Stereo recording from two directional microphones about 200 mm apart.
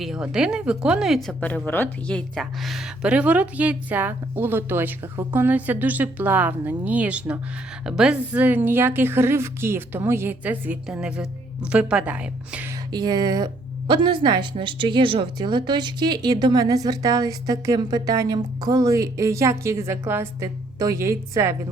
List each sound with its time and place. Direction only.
0.0 s speech: 5° right (ahead or behind)
12.9 s a woman's voice: 20° right (ahead or behind)